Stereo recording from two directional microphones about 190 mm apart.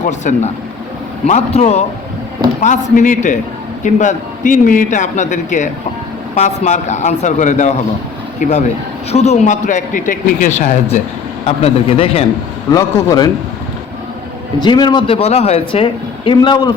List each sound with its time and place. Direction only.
0.0 s a man's voice: 40° left (ahead or behind)
12.7 s a man's voice: 20° left (ahead or behind)
14.6 s a man's voice: 25° left (ahead or behind)